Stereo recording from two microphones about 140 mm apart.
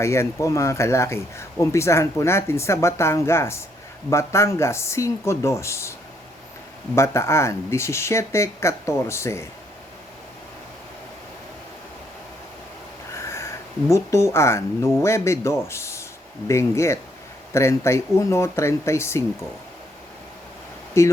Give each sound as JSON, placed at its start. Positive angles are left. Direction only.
{"t": 0.0, "sound": "speech", "side_deg": 20}
{"t": 6.9, "sound": "speech", "side_deg": 20}
{"t": 13.1, "sound": "a sound", "side_deg": 20}
{"t": 13.9, "sound": "speech", "side_deg": 20}
{"t": 21.0, "sound": "speech", "side_deg": 20}